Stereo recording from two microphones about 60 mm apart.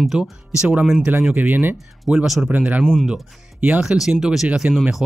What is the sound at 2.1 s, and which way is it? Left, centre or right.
Speech, centre.